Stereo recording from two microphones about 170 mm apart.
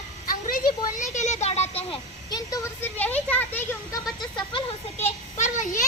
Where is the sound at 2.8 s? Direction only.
10° left (ahead or behind).